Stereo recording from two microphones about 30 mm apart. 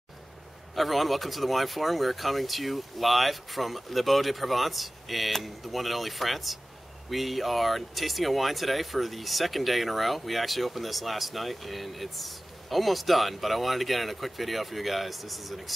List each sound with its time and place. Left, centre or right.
0.7 s speech: centre